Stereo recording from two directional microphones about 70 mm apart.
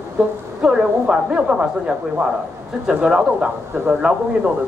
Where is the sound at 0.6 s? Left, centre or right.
Centre.